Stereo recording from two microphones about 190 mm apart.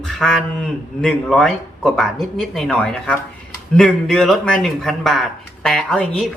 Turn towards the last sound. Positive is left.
turn(degrees=5)  # may be behind; listen again after turning